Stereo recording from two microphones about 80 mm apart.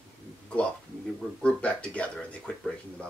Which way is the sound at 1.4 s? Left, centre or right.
Centre.